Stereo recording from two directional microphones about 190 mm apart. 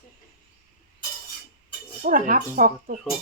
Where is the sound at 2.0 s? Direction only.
45° right (ahead or behind).